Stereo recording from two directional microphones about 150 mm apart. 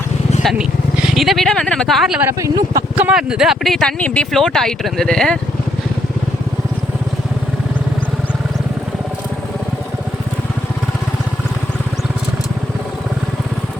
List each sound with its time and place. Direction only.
1.1 s speech: centre (ahead or behind)
2.2 s speech: 20° right (ahead or behind)
2.9 s speech: 10° right (ahead or behind)